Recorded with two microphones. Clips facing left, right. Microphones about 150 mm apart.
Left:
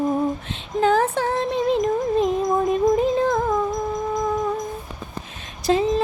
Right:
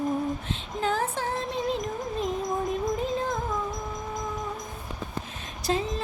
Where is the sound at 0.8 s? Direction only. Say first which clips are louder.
Left 9 dB; 80° left.